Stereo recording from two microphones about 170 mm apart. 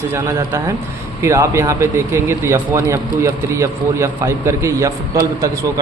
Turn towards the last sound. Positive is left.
turn(degrees=-20)  # may be behind; listen again after turning